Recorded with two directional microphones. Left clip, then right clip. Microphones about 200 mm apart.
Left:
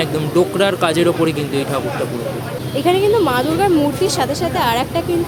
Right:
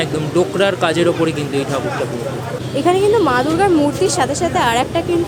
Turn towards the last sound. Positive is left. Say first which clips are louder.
# right 2 dB
turn(degrees=-5)  # may be behind; listen again after turning